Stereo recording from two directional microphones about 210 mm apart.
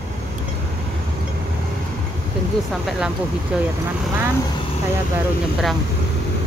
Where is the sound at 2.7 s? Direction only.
Centre (ahead or behind).